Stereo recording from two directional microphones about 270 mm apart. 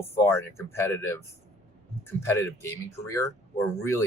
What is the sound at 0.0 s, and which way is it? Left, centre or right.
Speech, centre.